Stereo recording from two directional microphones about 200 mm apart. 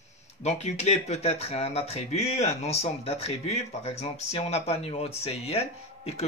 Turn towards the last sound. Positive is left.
turn(degrees=30)  # may be behind; listen again after turning